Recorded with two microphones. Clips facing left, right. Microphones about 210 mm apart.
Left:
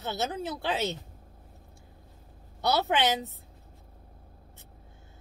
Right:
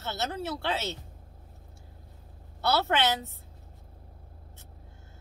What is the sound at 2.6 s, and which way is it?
Speech, 15° left (ahead or behind).